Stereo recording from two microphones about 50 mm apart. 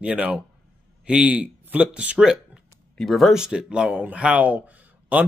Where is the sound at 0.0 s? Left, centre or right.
Right.